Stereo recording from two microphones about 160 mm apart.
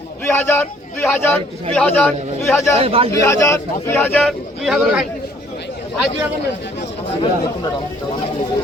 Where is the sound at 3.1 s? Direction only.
20° left (ahead or behind).